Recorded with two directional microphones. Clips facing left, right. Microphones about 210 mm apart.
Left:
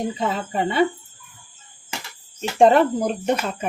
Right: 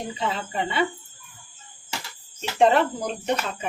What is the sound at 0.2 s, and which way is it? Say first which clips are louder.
Speech: left 4 dB; 45° left (ahead or behind).